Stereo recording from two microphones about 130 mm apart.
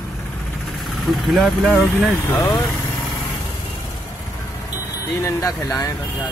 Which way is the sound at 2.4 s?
30° left (ahead or behind).